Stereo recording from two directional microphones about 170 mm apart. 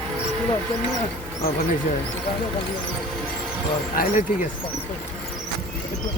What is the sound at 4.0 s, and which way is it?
Speech, 50° left (ahead or behind).